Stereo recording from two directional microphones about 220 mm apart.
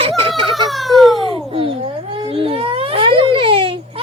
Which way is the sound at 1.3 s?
25° right (ahead or behind).